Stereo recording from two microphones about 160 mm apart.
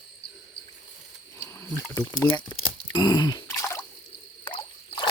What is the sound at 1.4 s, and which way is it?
Speech, 15° left (ahead or behind).